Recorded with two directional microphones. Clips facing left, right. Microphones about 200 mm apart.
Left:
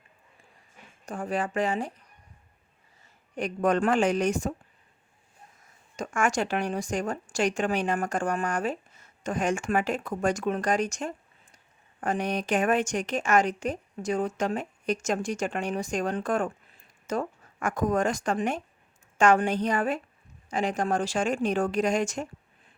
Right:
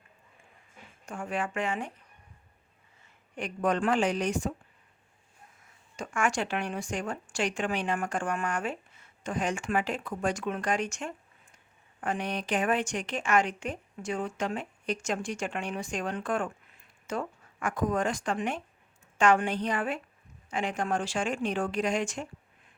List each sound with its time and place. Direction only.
1.0 s speech: 35° left (ahead or behind)
3.3 s speech: 45° left (ahead or behind)
5.6 s speech: 40° left (ahead or behind)